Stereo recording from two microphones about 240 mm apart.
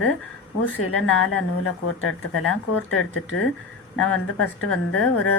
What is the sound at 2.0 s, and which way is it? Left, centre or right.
A woman's voice, left.